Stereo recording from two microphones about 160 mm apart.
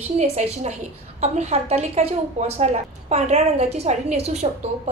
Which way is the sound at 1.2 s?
45° right (ahead or behind).